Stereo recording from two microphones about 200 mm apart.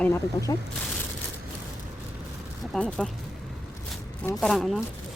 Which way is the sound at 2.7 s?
5° left (ahead or behind).